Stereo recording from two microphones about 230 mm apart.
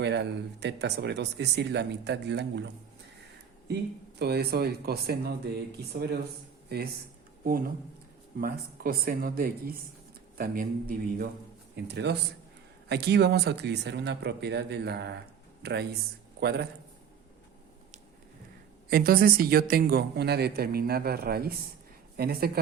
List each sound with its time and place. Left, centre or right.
0.0 s speech: right
4.2 s speech: right
8.4 s speech: right
18.9 s speech: right